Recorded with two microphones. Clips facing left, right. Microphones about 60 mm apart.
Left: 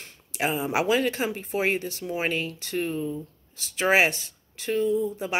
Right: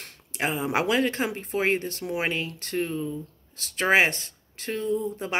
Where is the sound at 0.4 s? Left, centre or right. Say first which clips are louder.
Even; right.